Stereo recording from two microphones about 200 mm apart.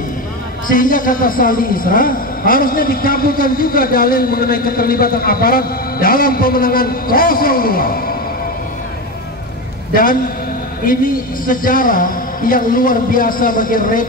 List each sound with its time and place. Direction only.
0.7 s a man's voice: 45° left (ahead or behind)
11.4 s a man's voice: 45° left (ahead or behind)